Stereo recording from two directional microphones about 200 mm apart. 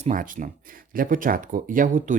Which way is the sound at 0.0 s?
40° right (ahead or behind).